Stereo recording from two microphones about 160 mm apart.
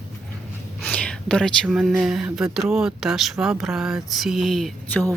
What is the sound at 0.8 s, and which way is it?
Whispering, 5° left (ahead or behind).